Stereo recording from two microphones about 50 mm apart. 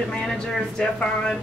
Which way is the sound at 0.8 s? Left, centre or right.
Centre.